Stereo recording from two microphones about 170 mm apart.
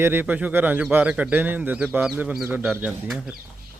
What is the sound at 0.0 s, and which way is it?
Speech, 10° right (ahead or behind).